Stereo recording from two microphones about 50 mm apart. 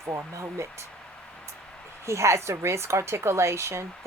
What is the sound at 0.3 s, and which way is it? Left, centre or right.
Speech, right.